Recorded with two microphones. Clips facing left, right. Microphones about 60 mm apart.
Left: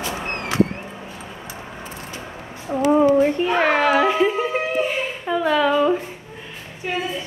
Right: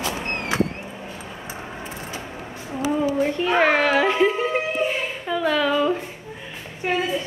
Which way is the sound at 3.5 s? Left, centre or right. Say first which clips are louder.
Right 1 dB; centre.